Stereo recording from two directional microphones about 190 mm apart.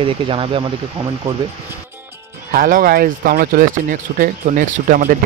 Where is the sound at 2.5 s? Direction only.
50° right (ahead or behind).